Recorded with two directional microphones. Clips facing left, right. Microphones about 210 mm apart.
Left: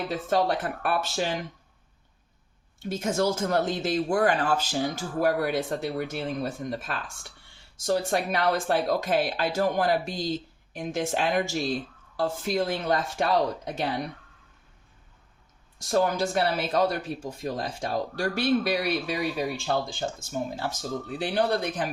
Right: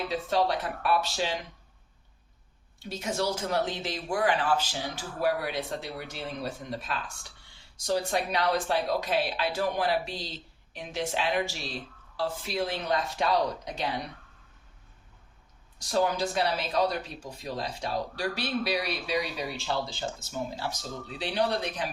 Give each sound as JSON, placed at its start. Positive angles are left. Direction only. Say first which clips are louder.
{"t": 0.1, "sound": "speech", "louder": "left 2 dB", "side_deg": 50}
{"t": 2.7, "sound": "speech", "louder": "left 5 dB", "side_deg": 50}
{"t": 15.8, "sound": "speech", "louder": "left 3 dB", "side_deg": 50}